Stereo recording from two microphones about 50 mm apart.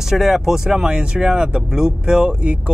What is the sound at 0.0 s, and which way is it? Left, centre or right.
Speech, centre.